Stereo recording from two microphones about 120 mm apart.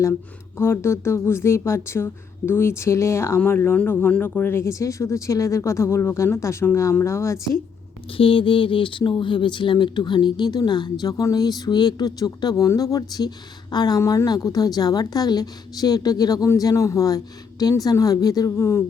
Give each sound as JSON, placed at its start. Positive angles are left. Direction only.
{"t": 0.0, "sound": "speech", "side_deg": 20}
{"t": 8.1, "sound": "speech", "side_deg": 50}